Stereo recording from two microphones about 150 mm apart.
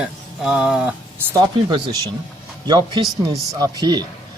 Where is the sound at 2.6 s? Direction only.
30° right (ahead or behind).